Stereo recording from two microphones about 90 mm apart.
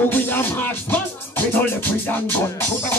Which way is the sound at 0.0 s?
25° left (ahead or behind).